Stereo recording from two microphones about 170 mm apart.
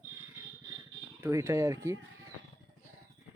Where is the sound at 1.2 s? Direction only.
15° right (ahead or behind).